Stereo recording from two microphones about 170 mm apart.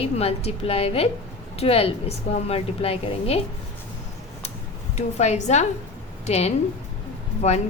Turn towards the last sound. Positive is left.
turn(degrees=40)  # may be behind; listen again after turning